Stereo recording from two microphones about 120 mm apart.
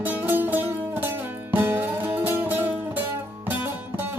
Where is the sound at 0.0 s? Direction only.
15° right (ahead or behind).